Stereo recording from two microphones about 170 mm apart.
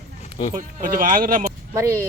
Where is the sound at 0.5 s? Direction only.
50° right (ahead or behind).